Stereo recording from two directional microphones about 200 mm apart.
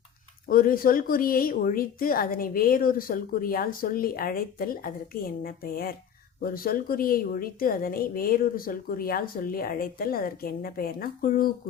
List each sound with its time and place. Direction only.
0.4 s a woman's voice: 45° left (ahead or behind)